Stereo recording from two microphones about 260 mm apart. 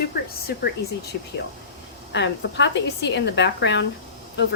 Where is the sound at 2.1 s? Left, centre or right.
Left.